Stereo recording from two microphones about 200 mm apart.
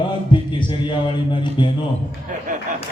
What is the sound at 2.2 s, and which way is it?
Speech, 40° right (ahead or behind).